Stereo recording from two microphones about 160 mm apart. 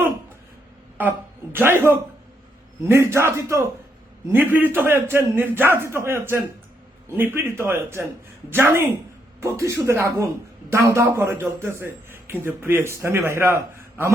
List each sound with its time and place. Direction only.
1.0 s a man's voice: 10° right (ahead or behind)